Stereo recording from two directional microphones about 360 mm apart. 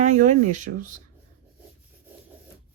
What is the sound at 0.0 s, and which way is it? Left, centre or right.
Speech, right.